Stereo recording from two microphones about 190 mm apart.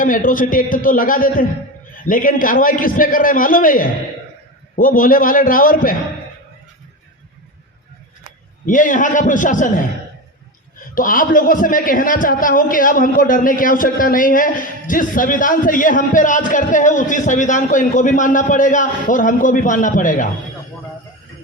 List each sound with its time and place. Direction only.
0.0 s a man's voice: 45° left (ahead or behind)
8.6 s a man's voice: 45° left (ahead or behind)
10.9 s a man's voice: 45° left (ahead or behind)